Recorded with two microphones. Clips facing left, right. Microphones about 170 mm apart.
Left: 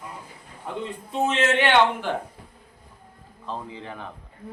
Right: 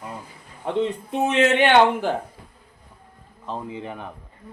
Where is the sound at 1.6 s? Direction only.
50° right (ahead or behind).